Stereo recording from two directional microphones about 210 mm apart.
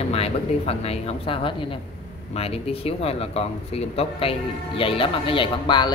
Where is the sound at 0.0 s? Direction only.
30° left (ahead or behind).